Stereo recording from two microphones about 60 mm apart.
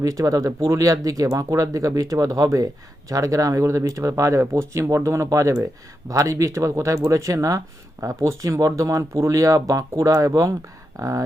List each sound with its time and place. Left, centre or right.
0.0 s speech: right